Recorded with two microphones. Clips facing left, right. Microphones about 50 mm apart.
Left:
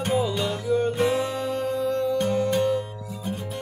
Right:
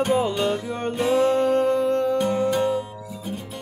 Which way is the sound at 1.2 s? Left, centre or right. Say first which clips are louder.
Right 8 dB; right.